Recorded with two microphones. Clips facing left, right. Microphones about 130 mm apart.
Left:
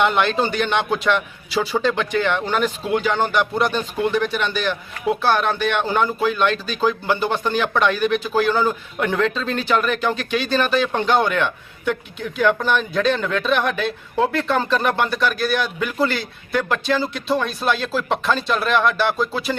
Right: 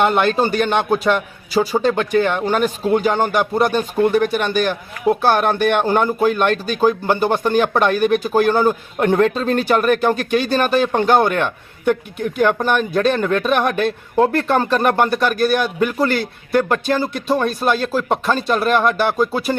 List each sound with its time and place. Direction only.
0.0 s a man's voice: 45° right (ahead or behind)